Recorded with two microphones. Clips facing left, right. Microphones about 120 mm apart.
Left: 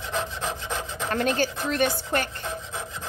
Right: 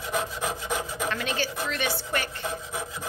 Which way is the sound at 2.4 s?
10° right (ahead or behind).